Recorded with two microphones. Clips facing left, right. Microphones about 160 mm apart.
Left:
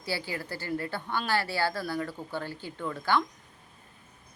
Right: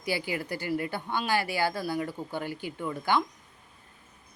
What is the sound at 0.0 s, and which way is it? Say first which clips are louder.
A woman's voice: right 3 dB; 15° right (ahead or behind).